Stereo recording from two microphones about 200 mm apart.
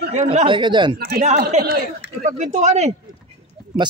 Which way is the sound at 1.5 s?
35° right (ahead or behind).